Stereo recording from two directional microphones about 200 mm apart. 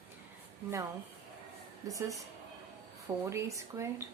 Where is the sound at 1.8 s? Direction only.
15° right (ahead or behind).